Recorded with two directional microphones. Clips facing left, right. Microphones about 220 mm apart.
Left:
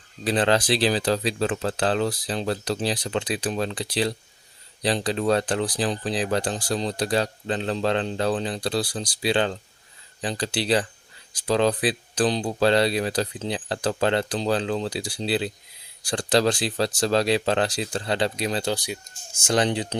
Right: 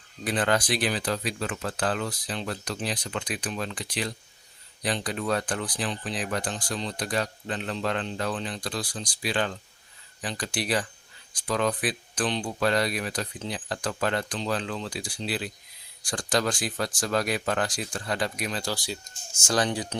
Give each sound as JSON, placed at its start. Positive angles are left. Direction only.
{"t": 0.3, "sound": "speech", "side_deg": 30}